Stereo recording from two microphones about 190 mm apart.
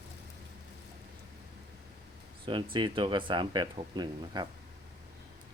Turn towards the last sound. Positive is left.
turn(degrees=-25)  # may be behind; listen again after turning